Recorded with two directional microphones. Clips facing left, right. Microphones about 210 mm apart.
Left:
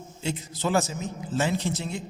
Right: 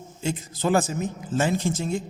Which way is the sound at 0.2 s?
50° right (ahead or behind).